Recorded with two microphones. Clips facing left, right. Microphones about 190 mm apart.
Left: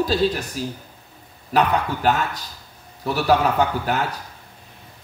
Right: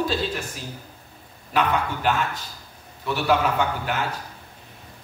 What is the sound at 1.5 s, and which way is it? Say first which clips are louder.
Speech: left 3 dB; 40° left (ahead or behind).